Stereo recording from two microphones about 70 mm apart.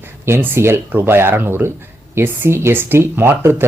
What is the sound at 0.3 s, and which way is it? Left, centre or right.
Speech, right.